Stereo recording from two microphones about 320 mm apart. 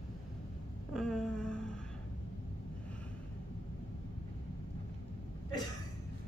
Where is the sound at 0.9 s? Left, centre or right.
Centre.